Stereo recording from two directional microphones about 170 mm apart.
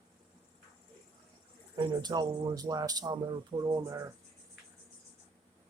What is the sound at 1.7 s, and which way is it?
Speech, 25° right (ahead or behind).